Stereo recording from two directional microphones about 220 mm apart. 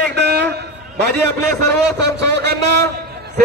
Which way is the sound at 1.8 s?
50° right (ahead or behind).